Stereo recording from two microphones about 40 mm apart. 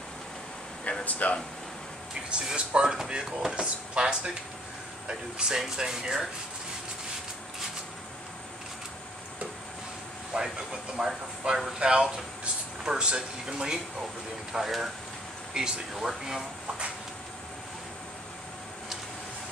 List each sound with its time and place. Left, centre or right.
1.0 s speech: left
2.5 s speech: right
10.3 s vehicle: right
11.0 s speech: centre
11.4 s speech: right
15.9 s speech: centre